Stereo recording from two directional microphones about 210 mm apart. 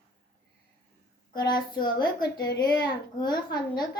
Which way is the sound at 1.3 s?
20° left (ahead or behind).